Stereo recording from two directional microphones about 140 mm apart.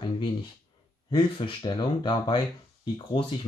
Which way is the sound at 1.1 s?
35° left (ahead or behind).